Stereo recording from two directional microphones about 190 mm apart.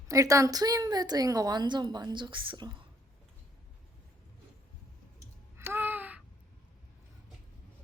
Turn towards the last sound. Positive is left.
turn(degrees=-10)  # may be behind; listen again after turning